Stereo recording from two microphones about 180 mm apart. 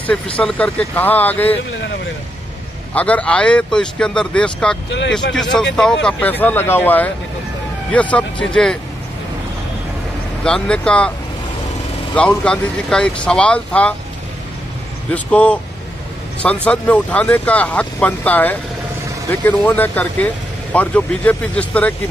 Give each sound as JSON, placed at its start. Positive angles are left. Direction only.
{"t": 0.0, "sound": "speech", "side_deg": 5}
{"t": 2.9, "sound": "speech", "side_deg": 10}
{"t": 4.8, "sound": "speech", "side_deg": 80}
{"t": 5.3, "sound": "speech", "side_deg": 5}
{"t": 10.4, "sound": "speech", "side_deg": 5}
{"t": 12.2, "sound": "speech", "side_deg": 5}
{"t": 15.0, "sound": "speech", "side_deg": 5}
{"t": 16.6, "sound": "speech", "side_deg": 5}